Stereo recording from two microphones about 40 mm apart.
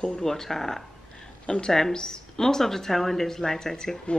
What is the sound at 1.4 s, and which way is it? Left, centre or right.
A woman's voice, left.